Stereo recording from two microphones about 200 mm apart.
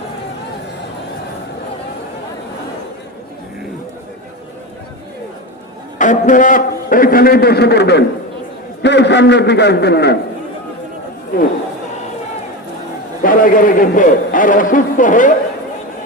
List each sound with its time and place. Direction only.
6.0 s a man's voice: 40° left (ahead or behind); by 10.2 s 55° left (ahead or behind)
13.2 s a man's voice: 45° left (ahead or behind)